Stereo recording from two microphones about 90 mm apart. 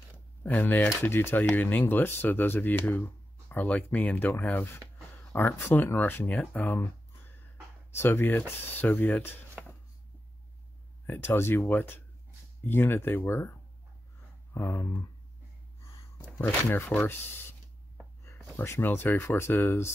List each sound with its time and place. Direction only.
0.4 s speech: 20° left (ahead or behind)
5.3 s speech: 25° left (ahead or behind)
7.9 s speech: 25° left (ahead or behind)
9.6 s a sound: 15° right (ahead or behind)
11.1 s speech: 25° left (ahead or behind)
16.3 s speech: 20° left (ahead or behind)
18.2 s a sound: 30° left (ahead or behind)
18.6 s speech: 25° left (ahead or behind)